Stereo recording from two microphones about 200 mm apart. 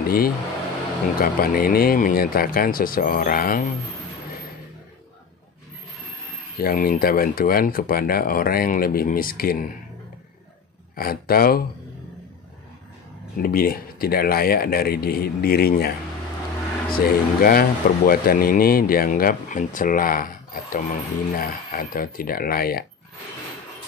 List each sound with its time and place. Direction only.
0.0 s speech: 50° left (ahead or behind)
6.6 s speech: 45° left (ahead or behind)
11.0 s speech: 50° left (ahead or behind)
13.4 s speech: 45° left (ahead or behind)
16.9 s speech: 50° left (ahead or behind)